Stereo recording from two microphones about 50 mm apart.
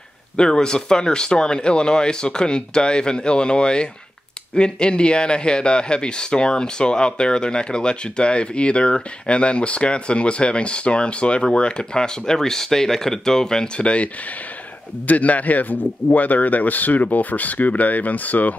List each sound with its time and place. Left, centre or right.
0.4 s speech: centre; by 18.5 s left